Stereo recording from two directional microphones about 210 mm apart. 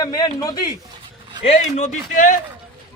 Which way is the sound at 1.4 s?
35° left (ahead or behind).